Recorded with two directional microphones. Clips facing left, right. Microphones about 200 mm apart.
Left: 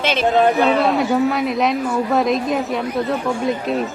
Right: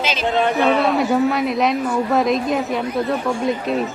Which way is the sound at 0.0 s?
60° left (ahead or behind).